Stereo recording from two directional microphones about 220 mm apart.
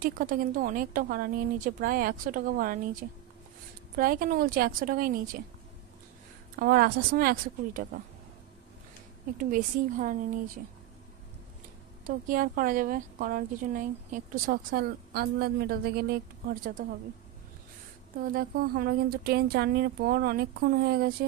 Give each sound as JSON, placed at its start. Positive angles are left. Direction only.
{"t": 0.0, "sound": "speech", "side_deg": -40}
{"t": 6.6, "sound": "speech", "side_deg": -40}
{"t": 9.4, "sound": "speech", "side_deg": -35}
{"t": 12.3, "sound": "speech", "side_deg": -40}
{"t": 18.3, "sound": "speech", "side_deg": -40}